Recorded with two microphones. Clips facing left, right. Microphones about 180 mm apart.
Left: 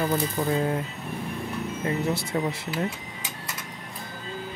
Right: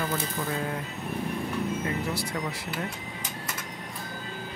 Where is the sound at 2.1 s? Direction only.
25° left (ahead or behind).